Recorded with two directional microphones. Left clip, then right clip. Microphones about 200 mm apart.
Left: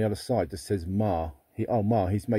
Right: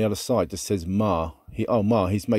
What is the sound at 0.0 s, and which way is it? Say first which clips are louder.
Speech: right 4 dB; 40° right (ahead or behind).